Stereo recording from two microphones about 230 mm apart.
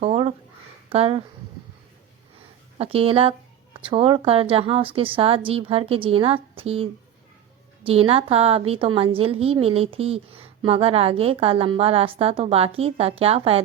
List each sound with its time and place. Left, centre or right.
0.0 s a sound: right
0.9 s speech: right
2.7 s a woman's voice: right
7.9 s a woman's voice: right